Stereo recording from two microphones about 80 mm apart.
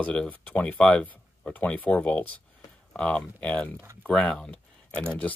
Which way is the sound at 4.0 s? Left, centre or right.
Centre.